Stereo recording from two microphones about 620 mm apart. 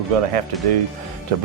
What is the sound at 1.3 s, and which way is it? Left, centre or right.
Speech, right.